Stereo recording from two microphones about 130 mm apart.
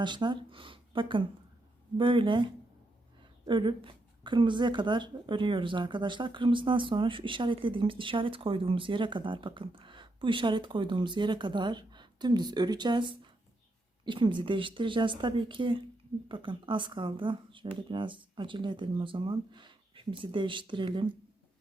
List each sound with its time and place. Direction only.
0.0 s speech: 35° right (ahead or behind)